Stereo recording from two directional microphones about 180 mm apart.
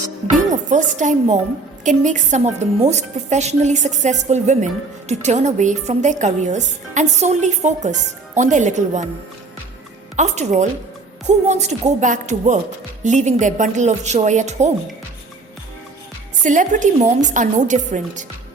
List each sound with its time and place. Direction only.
0.5 s a woman's voice: 45° right (ahead or behind)
10.2 s a woman's voice: 40° right (ahead or behind)
16.4 s a woman's voice: 45° right (ahead or behind)